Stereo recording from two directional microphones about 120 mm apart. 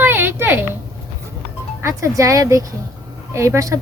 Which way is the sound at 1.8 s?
25° right (ahead or behind).